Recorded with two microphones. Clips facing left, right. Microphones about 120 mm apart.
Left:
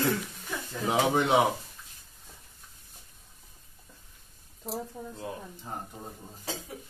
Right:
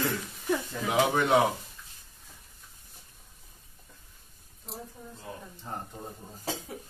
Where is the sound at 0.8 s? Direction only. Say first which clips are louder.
Even; 25° left (ahead or behind).